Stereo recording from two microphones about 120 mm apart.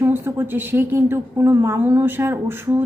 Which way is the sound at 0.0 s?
20° right (ahead or behind).